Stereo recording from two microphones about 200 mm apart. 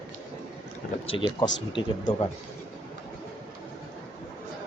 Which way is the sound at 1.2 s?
20° left (ahead or behind).